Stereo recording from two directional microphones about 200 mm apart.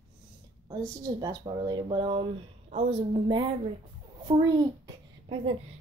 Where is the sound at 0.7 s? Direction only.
20° right (ahead or behind).